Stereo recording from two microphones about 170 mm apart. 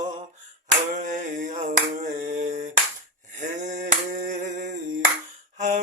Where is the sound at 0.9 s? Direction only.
50° right (ahead or behind).